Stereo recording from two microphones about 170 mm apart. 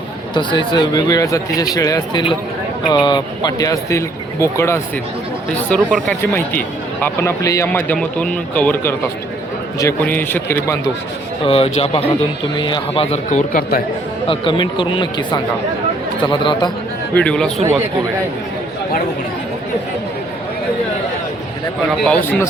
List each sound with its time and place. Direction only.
0.3 s speech: 25° left (ahead or behind)
11.4 s speech: 35° left (ahead or behind); by 13.8 s 60° left (ahead or behind)
14.3 s speech: 30° left (ahead or behind)
17.2 s a man's voice: 5° left (ahead or behind)
22.0 s speech: 10° left (ahead or behind)